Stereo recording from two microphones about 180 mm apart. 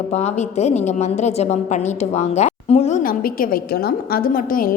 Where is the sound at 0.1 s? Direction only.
40° left (ahead or behind).